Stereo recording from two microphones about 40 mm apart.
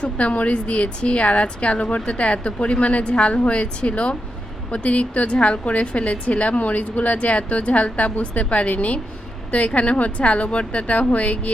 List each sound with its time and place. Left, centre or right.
0.0 s a woman's voice: left